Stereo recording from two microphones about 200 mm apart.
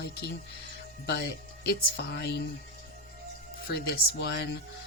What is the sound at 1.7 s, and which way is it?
Speech, 55° left (ahead or behind).